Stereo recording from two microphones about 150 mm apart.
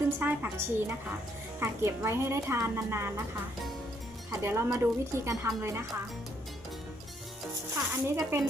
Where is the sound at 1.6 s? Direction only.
15° right (ahead or behind).